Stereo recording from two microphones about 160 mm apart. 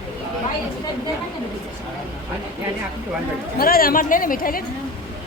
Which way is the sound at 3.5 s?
65° left (ahead or behind).